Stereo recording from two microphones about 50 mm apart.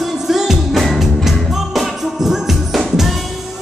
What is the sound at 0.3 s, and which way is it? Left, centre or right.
Music, centre.